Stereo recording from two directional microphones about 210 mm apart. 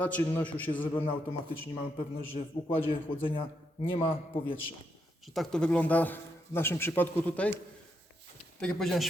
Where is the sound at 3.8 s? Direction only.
25° left (ahead or behind).